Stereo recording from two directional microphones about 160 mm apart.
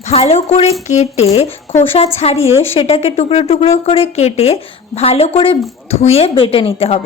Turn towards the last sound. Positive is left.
turn(degrees=40)  # may be behind; listen again after turning